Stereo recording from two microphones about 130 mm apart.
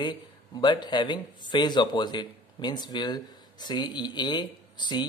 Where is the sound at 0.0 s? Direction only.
35° left (ahead or behind).